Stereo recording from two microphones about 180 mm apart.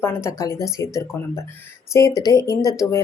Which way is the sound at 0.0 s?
15° left (ahead or behind).